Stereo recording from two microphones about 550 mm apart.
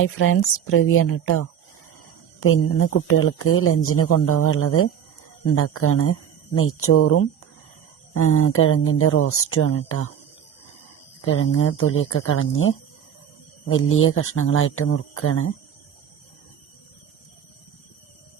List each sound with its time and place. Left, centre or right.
0.0 s speech: left
11.2 s speech: left